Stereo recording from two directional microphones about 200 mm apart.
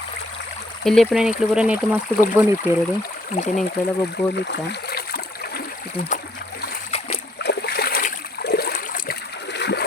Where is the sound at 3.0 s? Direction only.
40° left (ahead or behind).